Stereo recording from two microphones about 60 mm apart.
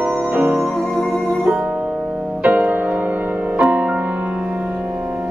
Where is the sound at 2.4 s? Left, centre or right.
Right.